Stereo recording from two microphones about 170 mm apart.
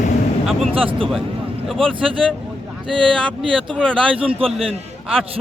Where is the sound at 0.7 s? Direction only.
30° right (ahead or behind).